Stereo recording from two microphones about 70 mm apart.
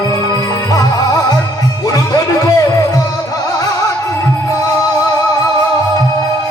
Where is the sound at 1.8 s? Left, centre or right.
Left.